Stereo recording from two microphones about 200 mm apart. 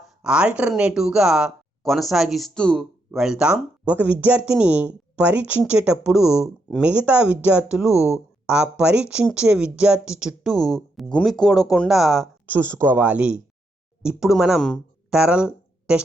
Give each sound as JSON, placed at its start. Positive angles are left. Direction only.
{"t": 0.0, "sound": "speech", "side_deg": -5}
{"t": 12.5, "sound": "speech", "side_deg": -10}